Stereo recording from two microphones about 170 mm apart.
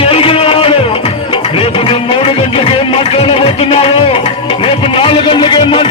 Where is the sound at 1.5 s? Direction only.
35° left (ahead or behind).